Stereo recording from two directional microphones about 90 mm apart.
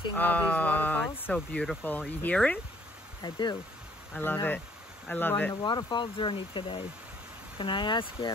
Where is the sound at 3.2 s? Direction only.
60° left (ahead or behind).